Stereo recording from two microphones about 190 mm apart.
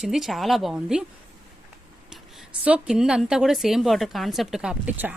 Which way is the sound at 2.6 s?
5° right (ahead or behind).